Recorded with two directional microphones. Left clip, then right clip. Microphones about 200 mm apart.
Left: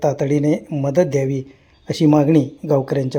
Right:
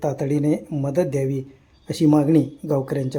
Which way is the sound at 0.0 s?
5° left (ahead or behind).